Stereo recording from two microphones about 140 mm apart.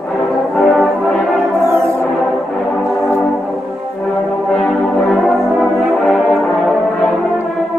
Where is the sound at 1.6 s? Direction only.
20° right (ahead or behind).